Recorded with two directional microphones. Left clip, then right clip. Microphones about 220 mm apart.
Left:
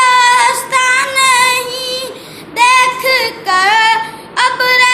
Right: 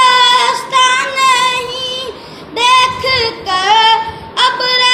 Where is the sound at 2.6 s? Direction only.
60° left (ahead or behind).